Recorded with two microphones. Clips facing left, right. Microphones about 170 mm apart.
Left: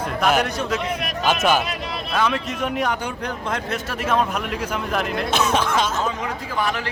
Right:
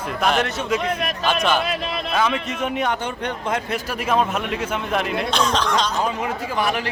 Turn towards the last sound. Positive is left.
turn(degrees=-15)  # may be behind; listen again after turning